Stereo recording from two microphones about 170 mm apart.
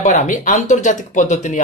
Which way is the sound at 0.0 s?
50° left (ahead or behind).